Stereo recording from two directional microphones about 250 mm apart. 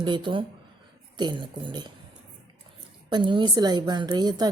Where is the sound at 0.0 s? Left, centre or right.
Centre.